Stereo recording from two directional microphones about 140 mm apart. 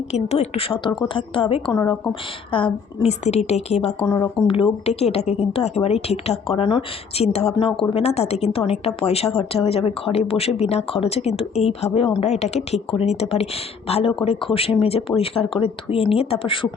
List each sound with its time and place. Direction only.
0.1 s a woman's voice: 50° left (ahead or behind)
1.7 s speech: 25° left (ahead or behind)
2.5 s speech: 40° left (ahead or behind)
4.0 s speech: 25° left (ahead or behind)
4.4 s a woman's voice: 40° left (ahead or behind)
7.9 s speech: 50° left (ahead or behind)